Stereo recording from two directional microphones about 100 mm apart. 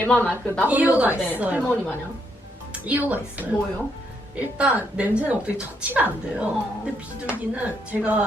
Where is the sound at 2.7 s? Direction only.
15° right (ahead or behind).